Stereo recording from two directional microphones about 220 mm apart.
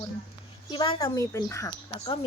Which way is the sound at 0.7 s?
25° left (ahead or behind).